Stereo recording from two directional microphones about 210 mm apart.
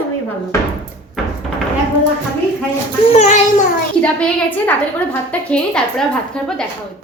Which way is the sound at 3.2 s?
35° left (ahead or behind).